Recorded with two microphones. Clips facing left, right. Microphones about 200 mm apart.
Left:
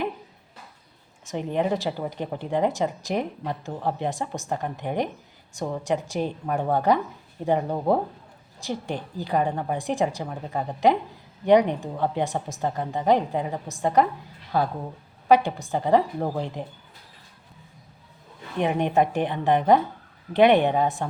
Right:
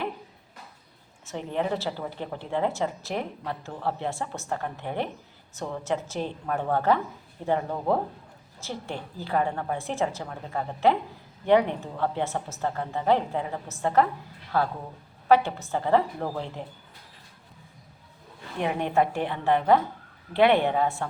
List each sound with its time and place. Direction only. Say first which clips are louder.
1.2 s a woman's voice: left 4 dB; 15° left (ahead or behind)
18.6 s a woman's voice: left 3 dB; 20° left (ahead or behind)